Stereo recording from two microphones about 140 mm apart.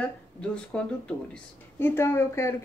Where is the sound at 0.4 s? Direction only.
10° left (ahead or behind).